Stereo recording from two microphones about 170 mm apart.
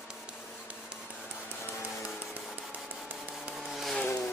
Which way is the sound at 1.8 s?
15° left (ahead or behind).